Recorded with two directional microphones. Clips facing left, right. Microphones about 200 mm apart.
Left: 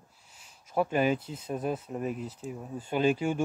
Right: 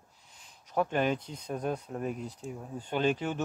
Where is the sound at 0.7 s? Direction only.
5° left (ahead or behind).